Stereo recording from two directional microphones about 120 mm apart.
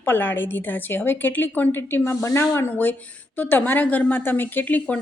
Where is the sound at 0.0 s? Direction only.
15° left (ahead or behind).